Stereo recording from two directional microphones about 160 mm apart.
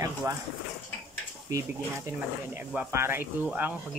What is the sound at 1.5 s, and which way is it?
Speech, 20° right (ahead or behind).